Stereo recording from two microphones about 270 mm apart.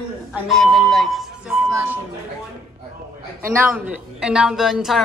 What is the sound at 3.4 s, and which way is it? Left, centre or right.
A woman's voice, centre.